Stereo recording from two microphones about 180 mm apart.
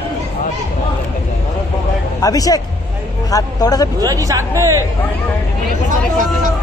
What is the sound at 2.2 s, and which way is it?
Speech, 20° left (ahead or behind).